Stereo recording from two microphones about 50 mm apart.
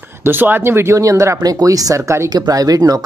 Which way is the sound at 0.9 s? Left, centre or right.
Right.